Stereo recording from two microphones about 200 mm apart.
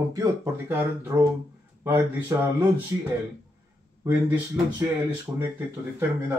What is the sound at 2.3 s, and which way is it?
Speech, 15° right (ahead or behind).